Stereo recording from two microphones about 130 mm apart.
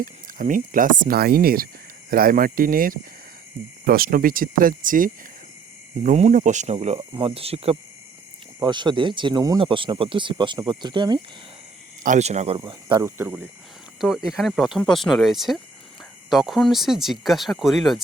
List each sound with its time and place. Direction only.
0.0 s speech: 90° right
4.0 s speech: 90° right
6.0 s speech: 65° right (ahead or behind); by 7.8 s 50° right (ahead or behind)
8.6 s speech: 35° right (ahead or behind)
12.0 s speech: 65° right (ahead or behind)
12.5 s speech: 40° right (ahead or behind)
13.0 s speech: 20° right (ahead or behind)
14.0 s speech: 5° right (ahead or behind)